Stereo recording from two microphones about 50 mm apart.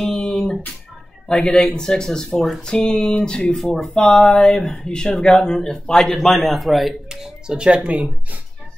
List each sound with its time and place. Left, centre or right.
0.0 s a sound: centre
1.2 s speech: centre
2.3 s a man's voice: centre
2.6 s speech: centre
3.5 s a man's voice: centre
3.9 s speech: centre
6.1 s a man's voice: centre
7.1 s speech: centre; by 8.4 s right